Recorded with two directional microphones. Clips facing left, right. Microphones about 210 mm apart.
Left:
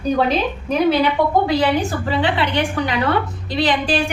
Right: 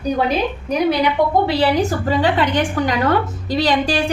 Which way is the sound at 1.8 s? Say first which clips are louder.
Right 2 dB; 40° right (ahead or behind).